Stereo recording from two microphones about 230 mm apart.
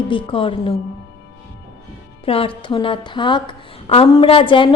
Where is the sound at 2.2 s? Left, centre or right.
Left.